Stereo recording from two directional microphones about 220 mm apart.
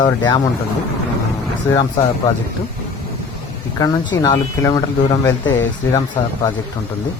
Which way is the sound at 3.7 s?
15° left (ahead or behind).